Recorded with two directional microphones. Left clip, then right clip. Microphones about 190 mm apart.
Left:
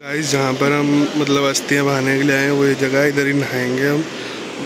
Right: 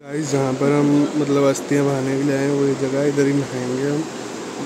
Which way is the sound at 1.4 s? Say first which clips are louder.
Right 3 dB; 15° right (ahead or behind).